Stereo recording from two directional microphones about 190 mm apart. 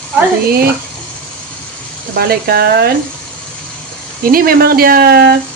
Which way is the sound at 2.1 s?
55° right (ahead or behind).